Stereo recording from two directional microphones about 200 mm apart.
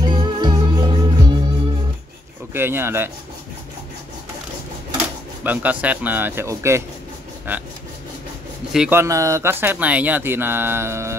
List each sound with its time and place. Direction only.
0.0 s music: 20° right (ahead or behind)
2.5 s speech: 10° right (ahead or behind)
5.4 s speech: 10° right (ahead or behind)
8.7 s speech: 5° right (ahead or behind)
9.0 s speech: 15° right (ahead or behind)